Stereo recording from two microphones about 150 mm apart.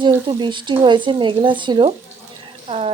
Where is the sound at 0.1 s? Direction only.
30° right (ahead or behind).